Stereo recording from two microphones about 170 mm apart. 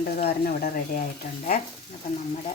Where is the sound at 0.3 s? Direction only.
60° left (ahead or behind).